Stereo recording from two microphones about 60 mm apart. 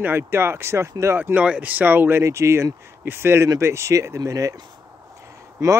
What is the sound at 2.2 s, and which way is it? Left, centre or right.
Speech, right.